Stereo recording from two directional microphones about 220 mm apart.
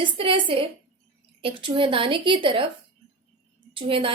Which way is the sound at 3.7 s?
25° right (ahead or behind).